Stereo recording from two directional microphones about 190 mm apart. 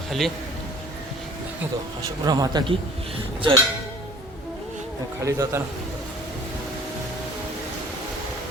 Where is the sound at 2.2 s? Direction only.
20° right (ahead or behind).